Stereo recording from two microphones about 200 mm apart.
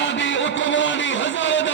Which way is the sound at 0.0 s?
65° left (ahead or behind).